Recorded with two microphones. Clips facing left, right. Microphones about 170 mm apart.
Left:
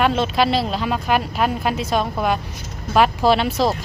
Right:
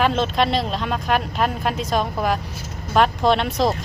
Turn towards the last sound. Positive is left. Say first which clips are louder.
# left 1 dB
turn(degrees=0)  # may be behind; listen again after turning